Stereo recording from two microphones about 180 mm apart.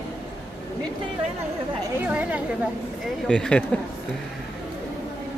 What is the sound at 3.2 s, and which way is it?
Speech, 5° left (ahead or behind).